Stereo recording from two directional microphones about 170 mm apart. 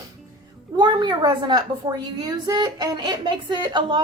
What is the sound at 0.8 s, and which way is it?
A woman's voice, 25° right (ahead or behind).